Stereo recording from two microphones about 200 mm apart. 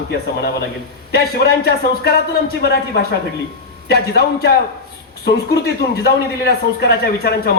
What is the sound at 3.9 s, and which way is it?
A man's voice, 50° left (ahead or behind).